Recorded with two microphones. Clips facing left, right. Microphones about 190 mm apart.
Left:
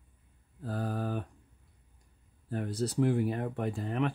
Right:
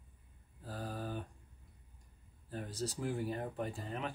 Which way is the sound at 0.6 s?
60° left (ahead or behind).